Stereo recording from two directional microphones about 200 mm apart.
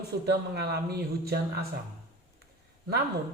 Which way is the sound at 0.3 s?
55° right (ahead or behind).